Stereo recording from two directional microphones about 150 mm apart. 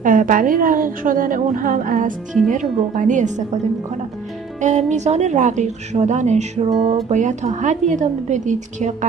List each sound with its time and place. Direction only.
0.0 s a woman's voice: 60° right (ahead or behind)
4.6 s speech: 50° right (ahead or behind)
6.7 s music: centre (ahead or behind)
7.1 s speech: 50° right (ahead or behind)